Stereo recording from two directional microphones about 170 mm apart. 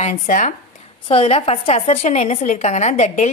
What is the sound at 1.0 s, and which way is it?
A woman's voice, 35° left (ahead or behind).